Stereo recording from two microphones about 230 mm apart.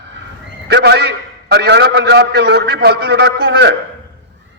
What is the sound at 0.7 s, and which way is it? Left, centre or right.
A man's voice, right.